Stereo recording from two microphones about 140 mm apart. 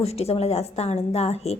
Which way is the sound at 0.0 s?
45° left (ahead or behind).